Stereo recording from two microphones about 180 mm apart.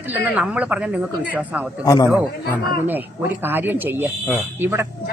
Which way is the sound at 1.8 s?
20° left (ahead or behind).